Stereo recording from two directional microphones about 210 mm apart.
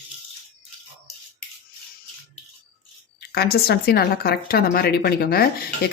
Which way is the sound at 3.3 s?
50° left (ahead or behind).